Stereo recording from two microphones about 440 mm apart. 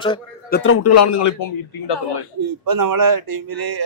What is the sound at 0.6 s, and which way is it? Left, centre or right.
Speech, left.